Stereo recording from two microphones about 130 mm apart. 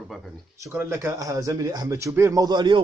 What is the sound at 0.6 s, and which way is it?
Speech, 20° right (ahead or behind).